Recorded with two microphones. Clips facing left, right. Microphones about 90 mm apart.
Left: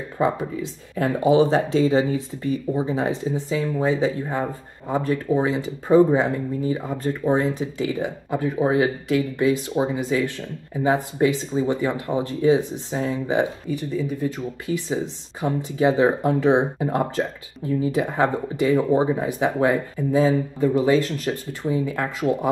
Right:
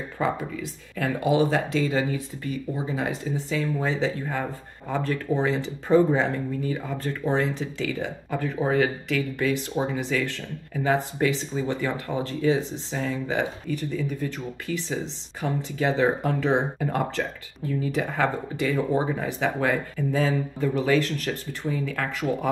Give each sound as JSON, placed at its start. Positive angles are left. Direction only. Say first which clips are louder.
{"t": 0.2, "sound": "speech", "louder": "left 5 dB", "side_deg": 25}